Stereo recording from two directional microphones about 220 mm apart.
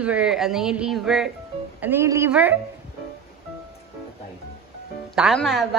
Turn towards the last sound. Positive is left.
turn(degrees=0)  # may be behind; listen again after turning